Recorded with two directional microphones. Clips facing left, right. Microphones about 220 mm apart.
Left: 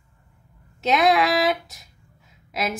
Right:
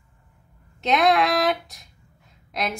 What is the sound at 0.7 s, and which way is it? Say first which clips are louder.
A woman's voice: even; centre (ahead or behind).